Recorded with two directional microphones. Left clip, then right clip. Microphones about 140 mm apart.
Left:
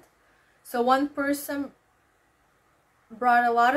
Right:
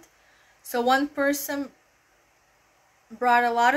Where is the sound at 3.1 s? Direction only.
10° left (ahead or behind).